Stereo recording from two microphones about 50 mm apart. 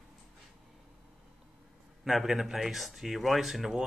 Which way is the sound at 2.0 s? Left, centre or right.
Centre.